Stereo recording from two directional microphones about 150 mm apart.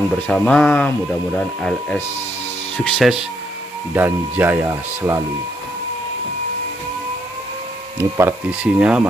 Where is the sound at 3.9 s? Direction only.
10° right (ahead or behind).